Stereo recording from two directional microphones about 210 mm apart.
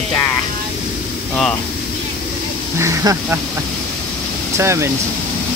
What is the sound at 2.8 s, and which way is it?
Speech, 15° right (ahead or behind).